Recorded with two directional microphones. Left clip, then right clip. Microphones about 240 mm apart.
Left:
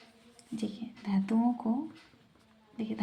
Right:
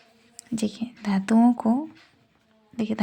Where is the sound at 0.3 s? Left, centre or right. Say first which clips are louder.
Right 9 dB; right.